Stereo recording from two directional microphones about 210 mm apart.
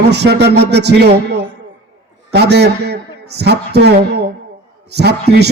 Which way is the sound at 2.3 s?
50° right (ahead or behind).